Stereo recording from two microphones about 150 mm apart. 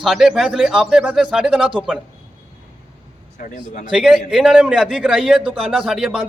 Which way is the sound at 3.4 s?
60° left (ahead or behind).